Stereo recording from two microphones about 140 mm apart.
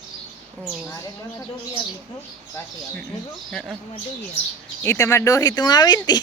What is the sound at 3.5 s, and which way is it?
Speech, 5° left (ahead or behind).